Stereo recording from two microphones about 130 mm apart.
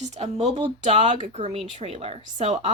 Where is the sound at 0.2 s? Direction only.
55° right (ahead or behind).